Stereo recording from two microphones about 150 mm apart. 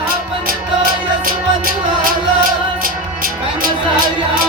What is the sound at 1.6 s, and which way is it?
Music, 70° right (ahead or behind).